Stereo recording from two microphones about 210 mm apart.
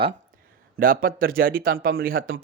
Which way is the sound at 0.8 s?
45° right (ahead or behind).